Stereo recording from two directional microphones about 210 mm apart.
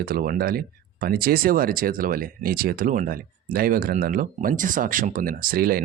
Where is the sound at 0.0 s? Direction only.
45° right (ahead or behind).